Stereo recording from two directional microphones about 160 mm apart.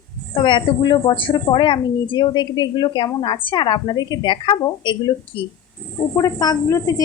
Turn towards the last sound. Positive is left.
turn(degrees=20)  # may be behind; listen again after turning